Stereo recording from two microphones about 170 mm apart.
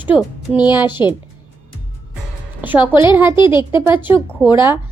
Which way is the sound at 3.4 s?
25° left (ahead or behind).